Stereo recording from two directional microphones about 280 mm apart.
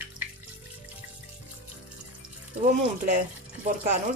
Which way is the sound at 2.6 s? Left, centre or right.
Right.